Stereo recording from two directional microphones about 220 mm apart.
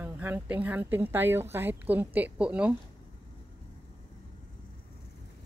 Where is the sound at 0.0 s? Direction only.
10° right (ahead or behind).